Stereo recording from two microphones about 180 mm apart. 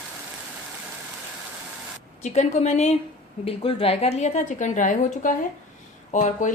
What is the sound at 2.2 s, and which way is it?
A woman's voice, 40° left (ahead or behind).